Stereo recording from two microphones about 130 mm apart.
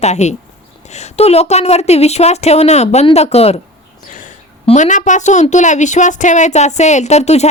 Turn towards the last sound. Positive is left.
turn(degrees=60)  # may be behind; listen again after turning